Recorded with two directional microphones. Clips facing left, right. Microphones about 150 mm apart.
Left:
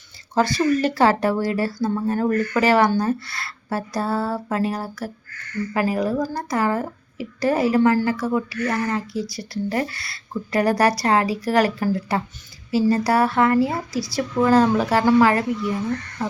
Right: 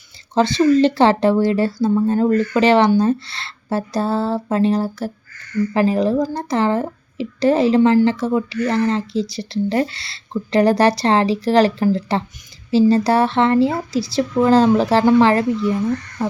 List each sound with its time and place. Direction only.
0.3 s speech: 25° right (ahead or behind)